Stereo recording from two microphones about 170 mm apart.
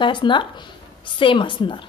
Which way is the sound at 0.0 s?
30° left (ahead or behind).